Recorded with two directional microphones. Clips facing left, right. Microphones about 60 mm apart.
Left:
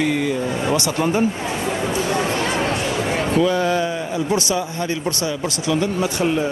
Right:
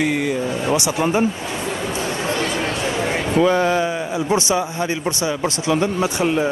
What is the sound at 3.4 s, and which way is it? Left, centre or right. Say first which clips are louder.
Speech: right 2 dB; right.